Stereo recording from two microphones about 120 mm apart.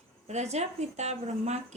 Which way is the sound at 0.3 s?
65° right (ahead or behind).